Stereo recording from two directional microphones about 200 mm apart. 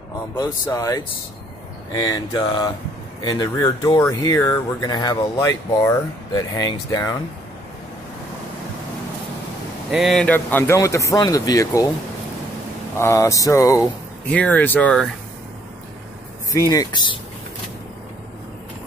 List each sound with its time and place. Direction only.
0.4 s speech: 15° left (ahead or behind)
9.8 s speech: centre (ahead or behind); by 11.9 s 15° left (ahead or behind)
12.9 s speech: 15° left (ahead or behind)
16.5 s speech: 20° left (ahead or behind)